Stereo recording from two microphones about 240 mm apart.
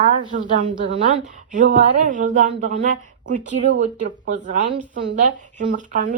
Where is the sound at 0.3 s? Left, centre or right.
Right.